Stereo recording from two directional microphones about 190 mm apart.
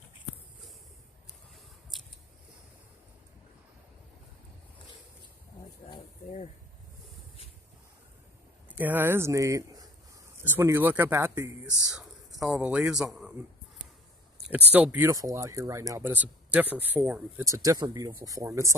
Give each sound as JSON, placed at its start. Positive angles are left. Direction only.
{"t": 1.9, "sound": "squish", "side_deg": 0}
{"t": 8.7, "sound": "a man's voice", "side_deg": -10}
{"t": 14.7, "sound": "speech", "side_deg": -10}